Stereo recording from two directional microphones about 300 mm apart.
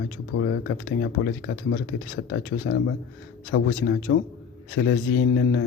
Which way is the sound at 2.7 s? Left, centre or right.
Left.